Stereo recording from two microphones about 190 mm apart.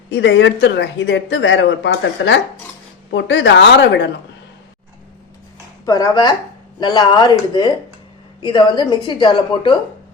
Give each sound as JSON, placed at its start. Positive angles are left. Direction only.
{"t": 0.1, "sound": "speech", "side_deg": 65}
{"t": 5.8, "sound": "speech", "side_deg": 20}